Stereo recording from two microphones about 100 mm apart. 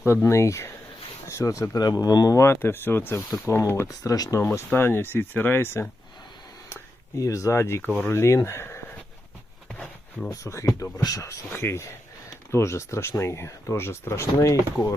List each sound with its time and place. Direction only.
0.0 s speech: 25° left (ahead or behind)
7.2 s speech: 30° left (ahead or behind)
9.6 s a sound: 10° left (ahead or behind)
10.3 s speech: 30° left (ahead or behind)
11.5 s speech: 25° left (ahead or behind)